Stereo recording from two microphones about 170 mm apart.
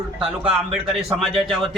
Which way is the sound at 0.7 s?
5° right (ahead or behind).